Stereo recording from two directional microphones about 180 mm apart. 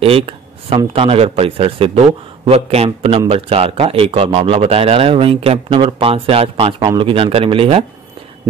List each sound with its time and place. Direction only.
0.0 s a man's voice: 30° right (ahead or behind)